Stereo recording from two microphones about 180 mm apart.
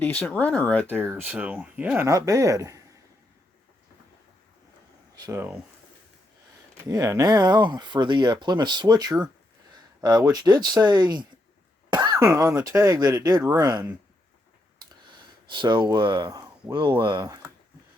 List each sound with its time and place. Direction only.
0.0 s speech: 5° left (ahead or behind)
1.0 s speech: 5° right (ahead or behind)
5.1 s speech: 20° right (ahead or behind)
6.8 s speech: 20° right (ahead or behind)
11.9 s cough: 20° right (ahead or behind)
12.6 s speech: 20° right (ahead or behind)
15.4 s speech: 25° right (ahead or behind)